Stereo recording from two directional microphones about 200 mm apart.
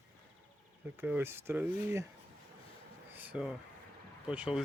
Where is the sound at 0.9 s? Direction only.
10° right (ahead or behind).